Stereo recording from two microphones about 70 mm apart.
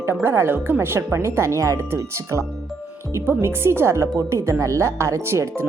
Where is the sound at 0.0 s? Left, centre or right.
Right.